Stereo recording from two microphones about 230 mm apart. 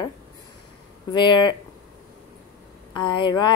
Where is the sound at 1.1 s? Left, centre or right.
Centre.